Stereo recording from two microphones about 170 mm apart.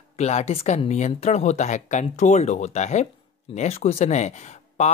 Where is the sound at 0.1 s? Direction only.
40° left (ahead or behind).